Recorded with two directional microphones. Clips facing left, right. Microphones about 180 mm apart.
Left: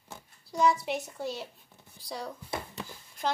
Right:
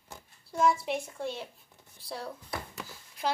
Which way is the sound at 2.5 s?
25° left (ahead or behind).